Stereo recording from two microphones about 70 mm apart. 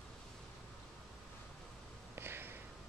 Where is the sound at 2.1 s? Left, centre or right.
Right.